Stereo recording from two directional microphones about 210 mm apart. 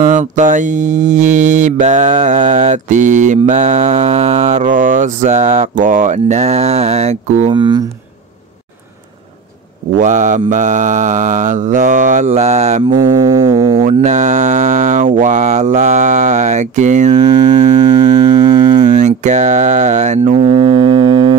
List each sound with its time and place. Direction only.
0.0 s mantra: 35° right (ahead or behind)
9.9 s mantra: 35° right (ahead or behind)
13.4 s music: 25° right (ahead or behind)
13.8 s mantra: 35° right (ahead or behind)
18.6 s a sound: 35° right (ahead or behind)
20.4 s music: 25° right (ahead or behind)